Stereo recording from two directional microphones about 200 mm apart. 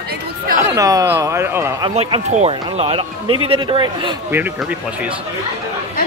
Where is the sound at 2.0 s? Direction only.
30° right (ahead or behind).